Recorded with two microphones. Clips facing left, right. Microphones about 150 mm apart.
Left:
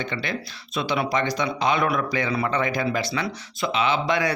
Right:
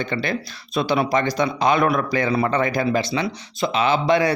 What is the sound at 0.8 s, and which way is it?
A man's voice, 40° right (ahead or behind).